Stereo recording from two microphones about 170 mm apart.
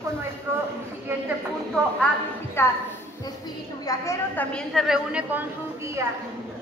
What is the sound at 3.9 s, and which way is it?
Speech, 15° left (ahead or behind).